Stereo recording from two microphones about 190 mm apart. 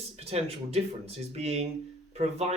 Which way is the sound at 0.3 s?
35° right (ahead or behind).